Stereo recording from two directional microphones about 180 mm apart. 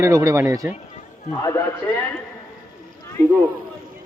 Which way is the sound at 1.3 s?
15° left (ahead or behind).